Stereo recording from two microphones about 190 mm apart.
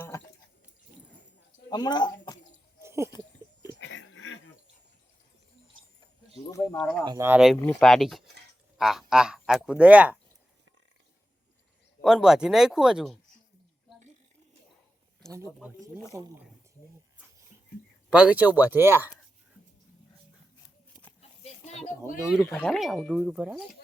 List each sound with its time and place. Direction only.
1.7 s speech: 20° left (ahead or behind)
2.8 s a sound: 15° right (ahead or behind)
3.8 s a sound: 70° left (ahead or behind); by 4.4 s 85° left
6.5 s speech: 20° left (ahead or behind)
6.7 s speech: 5° left (ahead or behind)
7.0 s speech: 20° right (ahead or behind)
7.3 s speech: 5° right (ahead or behind)
12.0 s speech: 5° right (ahead or behind)
15.2 s speech: 5° left (ahead or behind)
16.1 s speech: 10° right (ahead or behind)
18.1 s speech: 5° right (ahead or behind)
21.2 s a sound: 35° left (ahead or behind)
22.3 s speech: centre (ahead or behind)